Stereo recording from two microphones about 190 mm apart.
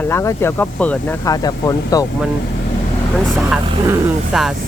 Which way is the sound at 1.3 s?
20° left (ahead or behind).